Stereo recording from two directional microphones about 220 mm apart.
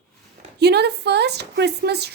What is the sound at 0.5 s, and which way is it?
Speech, 50° right (ahead or behind).